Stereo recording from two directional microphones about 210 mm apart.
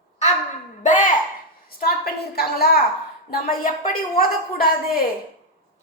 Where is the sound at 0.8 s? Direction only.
40° left (ahead or behind).